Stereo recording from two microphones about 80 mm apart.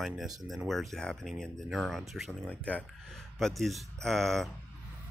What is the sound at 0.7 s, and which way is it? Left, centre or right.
Speech, centre.